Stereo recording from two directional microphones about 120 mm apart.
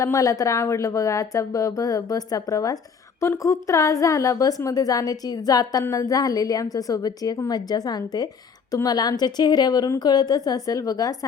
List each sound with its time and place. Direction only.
0.0 s a woman's voice: 30° left (ahead or behind)